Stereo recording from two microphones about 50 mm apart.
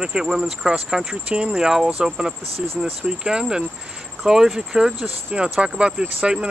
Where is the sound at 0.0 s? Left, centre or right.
Centre.